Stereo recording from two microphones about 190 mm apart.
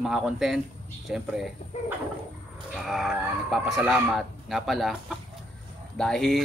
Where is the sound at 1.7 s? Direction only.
35° left (ahead or behind).